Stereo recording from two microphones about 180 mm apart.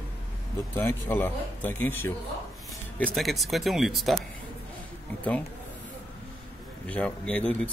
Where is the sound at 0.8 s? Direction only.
10° left (ahead or behind).